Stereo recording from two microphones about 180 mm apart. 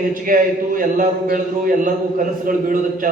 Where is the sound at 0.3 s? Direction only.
50° right (ahead or behind).